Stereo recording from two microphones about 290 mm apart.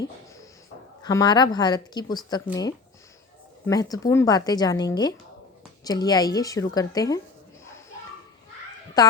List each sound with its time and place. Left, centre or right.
1.0 s speech: centre
9.0 s speech: centre